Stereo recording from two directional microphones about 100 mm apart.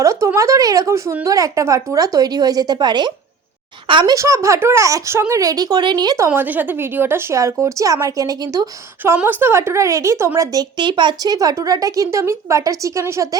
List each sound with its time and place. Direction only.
0.0 s a sound: 30° right (ahead or behind)
0.3 s a woman's voice: 35° right (ahead or behind); by 4.1 s 55° right (ahead or behind)
4.1 s a woman's voice: 30° right (ahead or behind)
6.3 s a woman's voice: 15° right (ahead or behind); by 8.6 s 35° right (ahead or behind)
9.1 s a woman's voice: 20° right (ahead or behind)